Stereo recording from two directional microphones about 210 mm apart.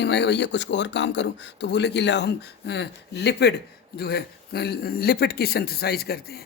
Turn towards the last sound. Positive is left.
turn(degrees=50)  # may be behind; listen again after turning